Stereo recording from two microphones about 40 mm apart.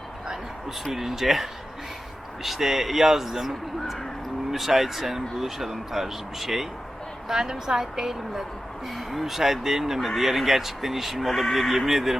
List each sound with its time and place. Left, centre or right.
0.9 s speech: centre
4.5 s speech: centre